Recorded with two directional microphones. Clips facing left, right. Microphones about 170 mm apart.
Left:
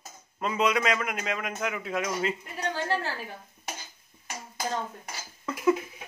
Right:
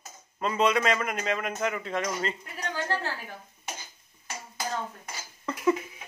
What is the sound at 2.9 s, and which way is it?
Speech, 20° left (ahead or behind).